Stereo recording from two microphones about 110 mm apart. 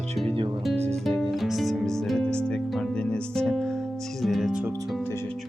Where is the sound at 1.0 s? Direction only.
Centre (ahead or behind).